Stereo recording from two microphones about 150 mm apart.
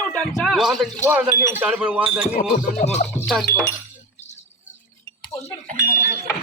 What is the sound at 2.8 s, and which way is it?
Music, 50° left (ahead or behind).